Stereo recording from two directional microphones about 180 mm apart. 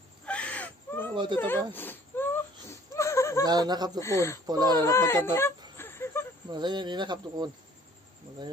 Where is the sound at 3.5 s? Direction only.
20° right (ahead or behind).